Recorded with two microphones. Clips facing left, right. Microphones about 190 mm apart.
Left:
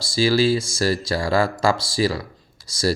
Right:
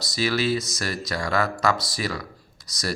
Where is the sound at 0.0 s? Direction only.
30° left (ahead or behind).